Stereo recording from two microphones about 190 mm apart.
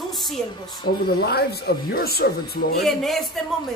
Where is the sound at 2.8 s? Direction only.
Centre (ahead or behind).